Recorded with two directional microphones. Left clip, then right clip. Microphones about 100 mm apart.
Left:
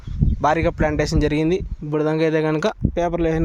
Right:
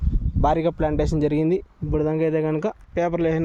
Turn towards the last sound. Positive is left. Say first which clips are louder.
# left 2 dB
turn(degrees=30)  # may be behind; listen again after turning